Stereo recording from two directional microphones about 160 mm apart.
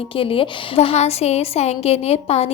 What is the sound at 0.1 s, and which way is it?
A woman's voice, 35° left (ahead or behind).